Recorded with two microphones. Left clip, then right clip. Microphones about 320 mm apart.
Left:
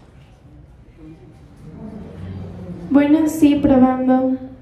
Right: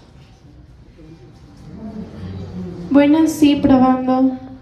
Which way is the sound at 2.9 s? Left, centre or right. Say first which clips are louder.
Right 2 dB; right.